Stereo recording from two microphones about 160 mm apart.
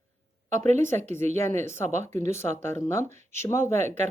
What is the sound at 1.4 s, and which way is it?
Speech, 15° left (ahead or behind).